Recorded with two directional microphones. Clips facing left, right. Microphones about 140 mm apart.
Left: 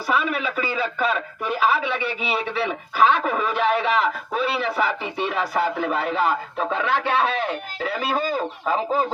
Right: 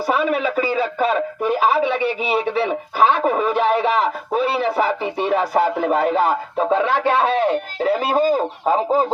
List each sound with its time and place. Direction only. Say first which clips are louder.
0.1 s a man's voice: right 4 dB; 40° right (ahead or behind)
6.6 s a man's voice: right 8 dB; 30° right (ahead or behind)